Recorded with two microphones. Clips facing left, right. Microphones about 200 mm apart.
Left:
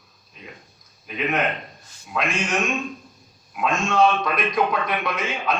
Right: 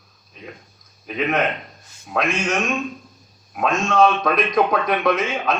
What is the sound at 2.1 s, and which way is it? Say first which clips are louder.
Speech: right 4 dB; 50° right (ahead or behind).